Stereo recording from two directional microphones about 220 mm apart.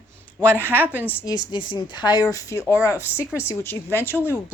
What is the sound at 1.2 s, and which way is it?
Speech, 15° left (ahead or behind).